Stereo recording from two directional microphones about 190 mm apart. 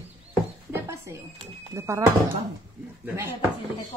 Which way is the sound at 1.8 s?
15° right (ahead or behind).